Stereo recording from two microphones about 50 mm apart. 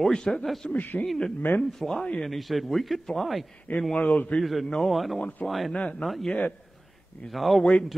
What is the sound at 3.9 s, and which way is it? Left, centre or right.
Speech, left.